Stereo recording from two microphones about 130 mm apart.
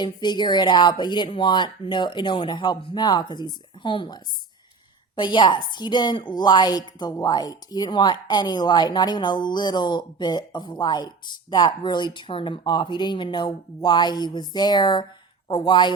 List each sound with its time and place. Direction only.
0.0 s a woman's voice: 35° left (ahead or behind)